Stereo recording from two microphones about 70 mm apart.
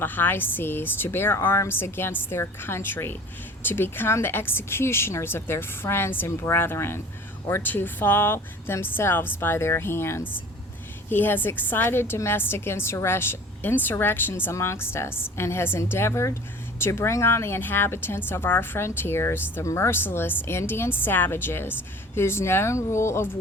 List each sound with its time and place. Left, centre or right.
0.0 s speech: left
20.1 s speech: left